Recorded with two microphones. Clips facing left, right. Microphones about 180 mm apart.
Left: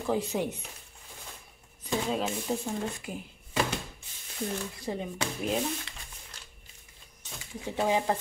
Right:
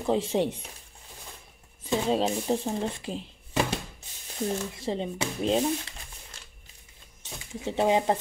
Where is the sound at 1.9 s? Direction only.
30° right (ahead or behind).